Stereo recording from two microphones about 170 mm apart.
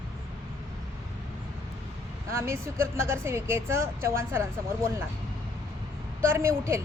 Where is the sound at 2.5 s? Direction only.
15° right (ahead or behind).